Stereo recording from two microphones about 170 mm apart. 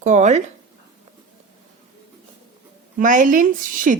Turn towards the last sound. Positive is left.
turn(degrees=-50)  # may be behind; listen again after turning